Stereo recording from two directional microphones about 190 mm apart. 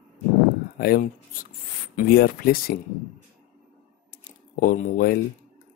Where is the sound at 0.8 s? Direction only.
50° left (ahead or behind).